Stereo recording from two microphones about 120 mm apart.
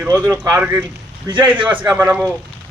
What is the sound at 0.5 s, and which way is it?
A man's voice, 15° right (ahead or behind).